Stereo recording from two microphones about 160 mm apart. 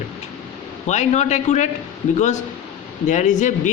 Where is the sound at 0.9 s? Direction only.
45° left (ahead or behind).